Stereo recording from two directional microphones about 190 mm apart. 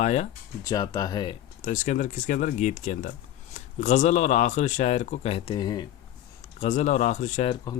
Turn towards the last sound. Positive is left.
turn(degrees=20)  # may be behind; listen again after turning